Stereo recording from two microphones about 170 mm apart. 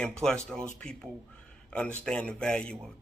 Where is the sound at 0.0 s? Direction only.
5° left (ahead or behind).